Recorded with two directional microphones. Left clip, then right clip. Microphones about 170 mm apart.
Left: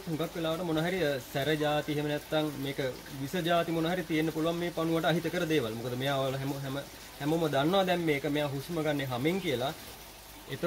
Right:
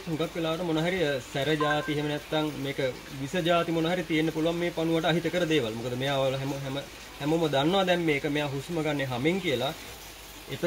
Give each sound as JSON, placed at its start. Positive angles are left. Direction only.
{"t": 0.2, "sound": "speech", "side_deg": 10}